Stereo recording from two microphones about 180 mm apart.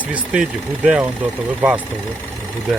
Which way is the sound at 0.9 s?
5° right (ahead or behind).